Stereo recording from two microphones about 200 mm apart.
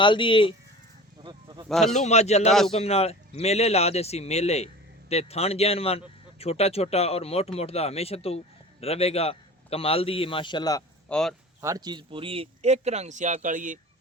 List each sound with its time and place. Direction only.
0.0 s a man's voice: 25° left (ahead or behind)
1.2 s a sound: 20° right (ahead or behind)
1.9 s speech: 35° left (ahead or behind)
2.5 s speech: centre (ahead or behind)
2.7 s a man's voice: 30° left (ahead or behind)
11.1 s speech: 5° left (ahead or behind)
11.6 s speech: 20° right (ahead or behind); by 13.7 s 40° right (ahead or behind)